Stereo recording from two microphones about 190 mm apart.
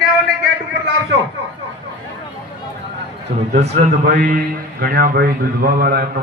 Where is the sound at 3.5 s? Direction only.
35° right (ahead or behind).